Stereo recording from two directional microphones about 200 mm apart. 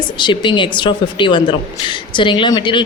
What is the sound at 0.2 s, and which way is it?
Speech, 25° left (ahead or behind).